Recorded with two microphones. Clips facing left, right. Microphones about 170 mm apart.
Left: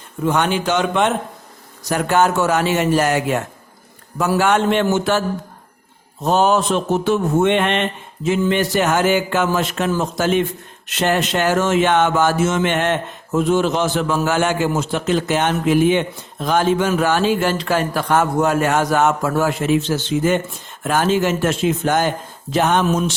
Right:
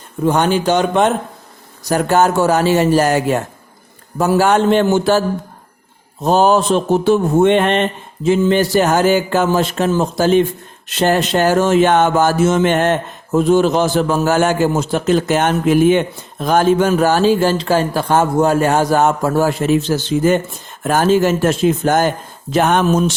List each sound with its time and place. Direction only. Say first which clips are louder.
0.3 s speech: right 4 dB; 35° right (ahead or behind)
6.2 s speech: right 3 dB; 35° right (ahead or behind)